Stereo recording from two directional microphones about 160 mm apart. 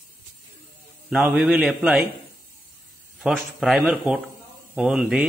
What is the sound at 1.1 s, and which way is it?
Speech, 5° right (ahead or behind).